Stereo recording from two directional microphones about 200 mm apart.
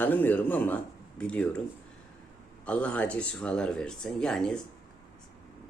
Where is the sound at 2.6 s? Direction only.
5° left (ahead or behind).